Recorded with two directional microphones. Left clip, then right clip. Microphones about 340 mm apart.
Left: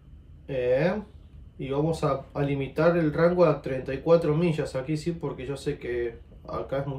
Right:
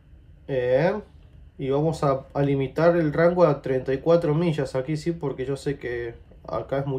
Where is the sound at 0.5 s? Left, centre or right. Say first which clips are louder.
Right 3 dB; centre.